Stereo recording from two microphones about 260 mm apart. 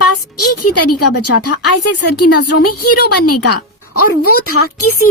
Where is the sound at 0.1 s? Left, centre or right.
Left.